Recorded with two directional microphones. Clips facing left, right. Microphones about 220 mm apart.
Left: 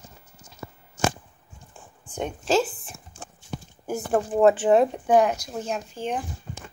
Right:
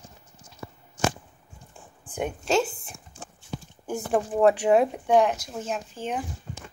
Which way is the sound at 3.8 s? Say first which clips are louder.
Left 1 dB; centre (ahead or behind).